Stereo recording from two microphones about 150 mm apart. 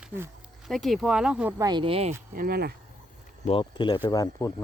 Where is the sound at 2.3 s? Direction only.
80° right.